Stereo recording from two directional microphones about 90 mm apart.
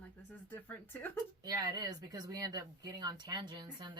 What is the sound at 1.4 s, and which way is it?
Speech, 45° right (ahead or behind).